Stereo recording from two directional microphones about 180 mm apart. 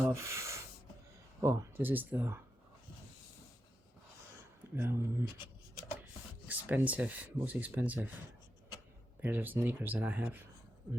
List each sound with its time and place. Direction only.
0.0 s rub: 15° right (ahead or behind)
1.4 s speech: 15° right (ahead or behind)
4.7 s speech: 15° right (ahead or behind)
6.5 s speech: 10° right (ahead or behind)
9.2 s speech: 10° right (ahead or behind)